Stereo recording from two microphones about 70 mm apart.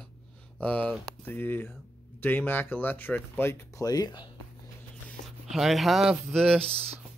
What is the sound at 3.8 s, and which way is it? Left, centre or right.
Speech, left.